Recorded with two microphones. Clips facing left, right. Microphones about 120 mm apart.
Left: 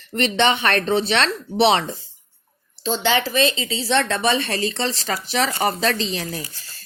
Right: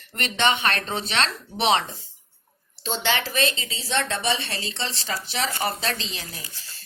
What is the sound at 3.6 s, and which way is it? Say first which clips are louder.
Speech: left 6 dB; 85° left.